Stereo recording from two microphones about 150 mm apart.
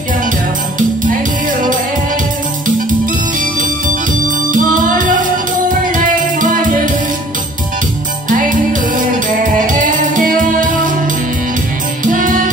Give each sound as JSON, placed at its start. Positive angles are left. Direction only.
{"t": 3.3, "sound": "music", "side_deg": -60}
{"t": 8.3, "sound": "music", "side_deg": -60}
{"t": 12.0, "sound": "music", "side_deg": -60}